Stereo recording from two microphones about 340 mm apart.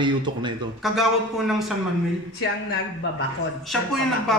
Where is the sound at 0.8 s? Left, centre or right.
Centre.